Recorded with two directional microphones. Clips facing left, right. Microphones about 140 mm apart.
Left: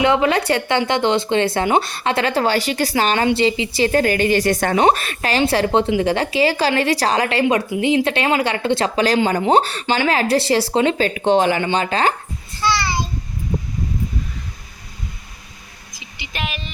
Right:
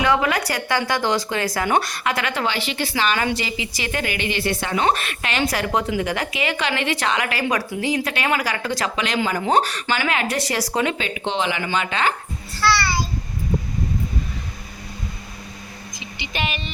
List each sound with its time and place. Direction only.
0.0 s a woman's voice: 25° left (ahead or behind)
7.4 s a woman's voice: 20° left (ahead or behind); by 11.6 s 45° left (ahead or behind)
11.6 s a woman's voice: 35° left (ahead or behind)
12.5 s a woman's voice: 20° left (ahead or behind)
16.0 s speech: 5° left (ahead or behind)